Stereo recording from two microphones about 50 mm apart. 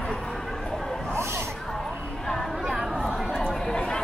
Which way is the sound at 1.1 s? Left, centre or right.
Right.